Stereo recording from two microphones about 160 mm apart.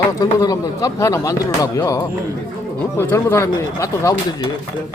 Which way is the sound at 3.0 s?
15° left (ahead or behind).